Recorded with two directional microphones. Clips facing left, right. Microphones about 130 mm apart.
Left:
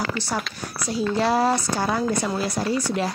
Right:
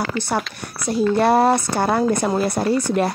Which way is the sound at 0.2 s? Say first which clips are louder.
Right 4 dB; 60° right (ahead or behind).